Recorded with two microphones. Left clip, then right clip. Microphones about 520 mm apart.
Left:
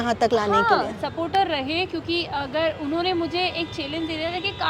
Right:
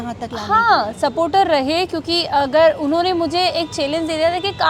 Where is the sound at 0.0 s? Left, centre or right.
Left.